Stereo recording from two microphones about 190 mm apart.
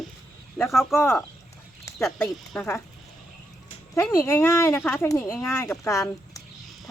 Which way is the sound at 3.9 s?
10° left (ahead or behind).